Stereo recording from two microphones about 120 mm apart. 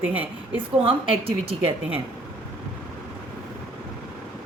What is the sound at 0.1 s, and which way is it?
Speech, 15° right (ahead or behind).